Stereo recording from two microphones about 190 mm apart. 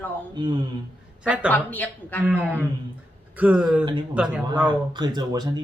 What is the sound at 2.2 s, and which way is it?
Speech, 10° right (ahead or behind).